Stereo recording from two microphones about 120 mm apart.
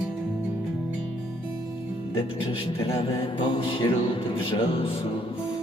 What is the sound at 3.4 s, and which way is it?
Music, 45° left (ahead or behind).